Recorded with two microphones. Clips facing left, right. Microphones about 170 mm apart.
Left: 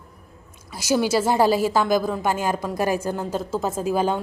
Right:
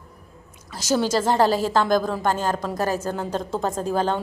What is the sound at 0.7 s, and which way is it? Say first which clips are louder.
A woman's voice: left 1 dB; 10° left (ahead or behind).